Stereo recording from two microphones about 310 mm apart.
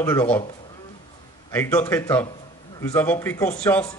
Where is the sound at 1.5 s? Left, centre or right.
Centre.